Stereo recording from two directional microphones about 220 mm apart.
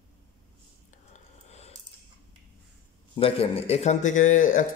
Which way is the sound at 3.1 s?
25° left (ahead or behind).